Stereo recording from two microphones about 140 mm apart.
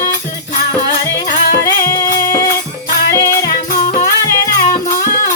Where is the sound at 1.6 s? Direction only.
25° left (ahead or behind).